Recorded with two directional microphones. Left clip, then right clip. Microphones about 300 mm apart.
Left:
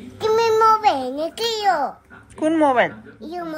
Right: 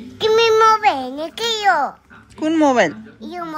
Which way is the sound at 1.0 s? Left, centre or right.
Centre.